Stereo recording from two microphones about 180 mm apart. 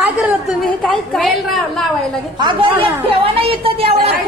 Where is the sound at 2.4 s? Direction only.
25° right (ahead or behind).